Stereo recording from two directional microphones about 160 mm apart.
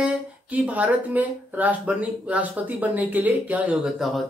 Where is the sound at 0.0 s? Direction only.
10° right (ahead or behind).